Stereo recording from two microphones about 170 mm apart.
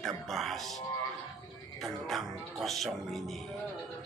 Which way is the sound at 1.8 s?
Centre (ahead or behind).